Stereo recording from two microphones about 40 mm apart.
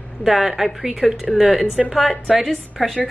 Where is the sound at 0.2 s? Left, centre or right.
Centre.